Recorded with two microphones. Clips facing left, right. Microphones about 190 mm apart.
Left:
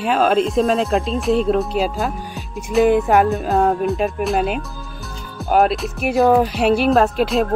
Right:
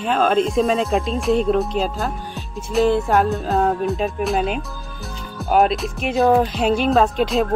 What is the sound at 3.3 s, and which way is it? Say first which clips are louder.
Speech: left 2 dB; centre (ahead or behind).